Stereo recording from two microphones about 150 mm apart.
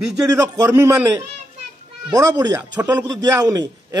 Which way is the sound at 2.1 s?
25° right (ahead or behind).